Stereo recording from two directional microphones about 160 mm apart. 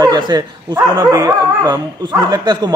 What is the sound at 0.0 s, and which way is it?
Speech, 25° right (ahead or behind).